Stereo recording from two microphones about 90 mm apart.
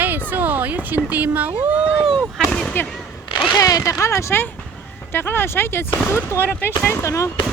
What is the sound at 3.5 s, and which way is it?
Speech, 45° left (ahead or behind).